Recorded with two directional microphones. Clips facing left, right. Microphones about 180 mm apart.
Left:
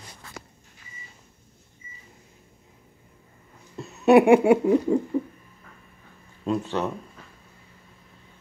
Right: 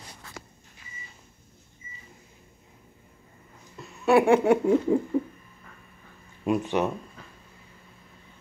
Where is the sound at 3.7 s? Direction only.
20° left (ahead or behind).